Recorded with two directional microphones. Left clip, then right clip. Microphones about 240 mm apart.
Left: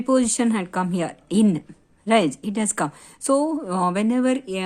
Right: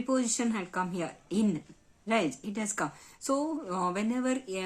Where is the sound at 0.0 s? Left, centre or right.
Left.